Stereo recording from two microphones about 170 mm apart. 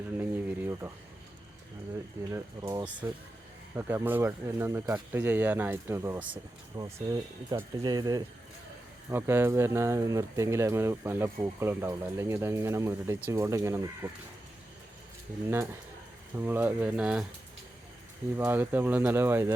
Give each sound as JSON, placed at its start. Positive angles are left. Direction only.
{"t": 0.2, "sound": "a sound", "side_deg": -10}
{"t": 2.3, "sound": "speech", "side_deg": -20}
{"t": 6.7, "sound": "speech", "side_deg": -20}
{"t": 15.4, "sound": "speech", "side_deg": -15}
{"t": 18.3, "sound": "speech", "side_deg": -10}